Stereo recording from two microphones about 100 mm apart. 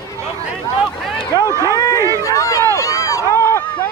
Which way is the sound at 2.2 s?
35° left (ahead or behind).